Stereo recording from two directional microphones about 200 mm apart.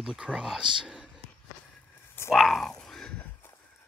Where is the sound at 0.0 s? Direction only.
5° right (ahead or behind).